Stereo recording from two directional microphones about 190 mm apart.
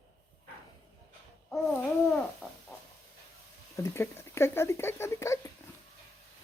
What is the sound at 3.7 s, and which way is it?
Speech, 15° left (ahead or behind).